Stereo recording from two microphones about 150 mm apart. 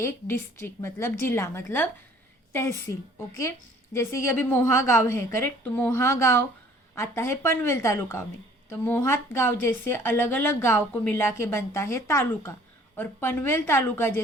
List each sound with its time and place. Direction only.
0.0 s speech: 15° left (ahead or behind)